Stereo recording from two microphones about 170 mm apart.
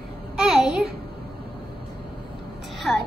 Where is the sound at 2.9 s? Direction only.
Centre (ahead or behind).